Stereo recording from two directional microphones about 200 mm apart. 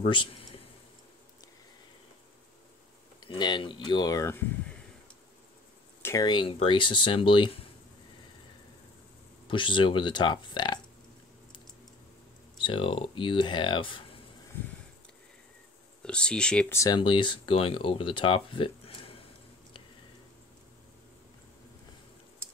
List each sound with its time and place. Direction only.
0.0 s speech: 25° left (ahead or behind)
3.2 s speech: 20° left (ahead or behind)
6.0 s speech: 20° left (ahead or behind)
9.5 s speech: 25° left (ahead or behind)
12.6 s speech: 25° left (ahead or behind)
16.0 s speech: 5° left (ahead or behind); by 19.1 s 25° left (ahead or behind)